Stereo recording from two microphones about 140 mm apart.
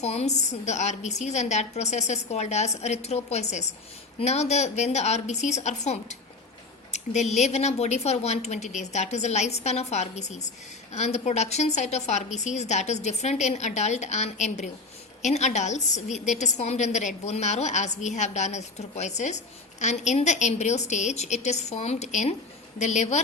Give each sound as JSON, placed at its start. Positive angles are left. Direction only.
{"t": 0.0, "sound": "a woman's voice", "side_deg": 50}